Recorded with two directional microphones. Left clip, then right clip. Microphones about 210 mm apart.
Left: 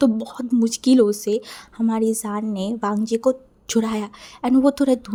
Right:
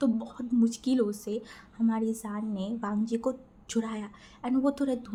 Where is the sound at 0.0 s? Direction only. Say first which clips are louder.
Left 10 dB; 45° left (ahead or behind).